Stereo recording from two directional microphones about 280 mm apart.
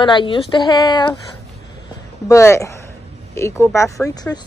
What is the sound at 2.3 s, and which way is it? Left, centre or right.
Speech, centre.